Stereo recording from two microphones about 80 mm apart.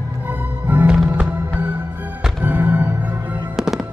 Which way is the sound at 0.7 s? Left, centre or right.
Right.